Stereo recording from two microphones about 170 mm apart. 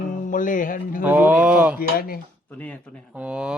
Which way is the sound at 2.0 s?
60° left (ahead or behind).